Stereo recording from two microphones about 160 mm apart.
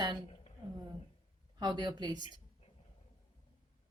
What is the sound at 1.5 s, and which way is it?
Speech, 30° right (ahead or behind).